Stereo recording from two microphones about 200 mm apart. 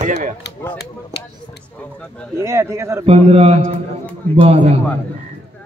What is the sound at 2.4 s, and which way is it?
Speech, 15° right (ahead or behind).